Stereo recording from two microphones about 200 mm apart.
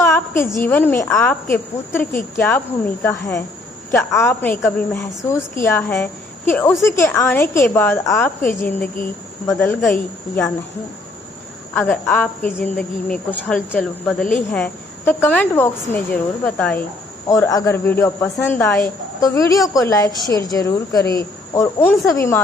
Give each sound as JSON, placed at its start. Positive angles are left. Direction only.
{"t": 0.0, "sound": "speech", "side_deg": 10}
{"t": 11.7, "sound": "speech", "side_deg": 10}